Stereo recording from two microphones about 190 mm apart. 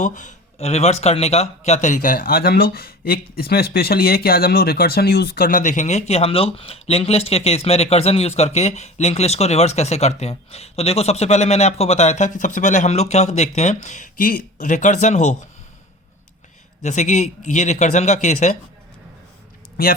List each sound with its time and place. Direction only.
0.0 s a man's voice: 40° left (ahead or behind)
16.8 s speech: 40° left (ahead or behind)